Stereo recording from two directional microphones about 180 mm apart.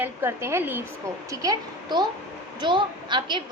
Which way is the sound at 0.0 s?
15° right (ahead or behind).